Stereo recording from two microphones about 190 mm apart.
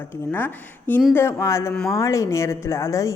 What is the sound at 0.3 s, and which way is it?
A woman's voice, 10° left (ahead or behind).